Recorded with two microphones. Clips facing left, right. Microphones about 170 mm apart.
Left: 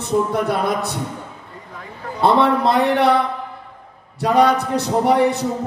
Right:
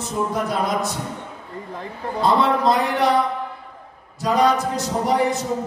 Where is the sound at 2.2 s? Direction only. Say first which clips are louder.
Left 3 dB; 65° left (ahead or behind).